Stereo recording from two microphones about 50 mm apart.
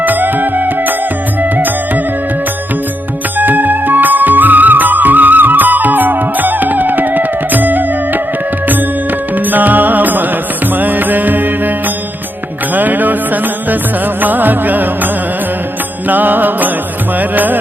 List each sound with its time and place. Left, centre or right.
0.0 s music: right
3.3 s music: right
9.3 s music: right
12.7 s music: right